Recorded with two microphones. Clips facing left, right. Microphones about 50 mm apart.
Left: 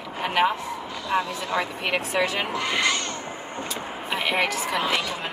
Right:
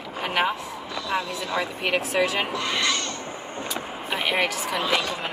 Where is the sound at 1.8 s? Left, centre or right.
Centre.